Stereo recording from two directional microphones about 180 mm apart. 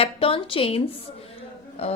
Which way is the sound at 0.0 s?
30° left (ahead or behind).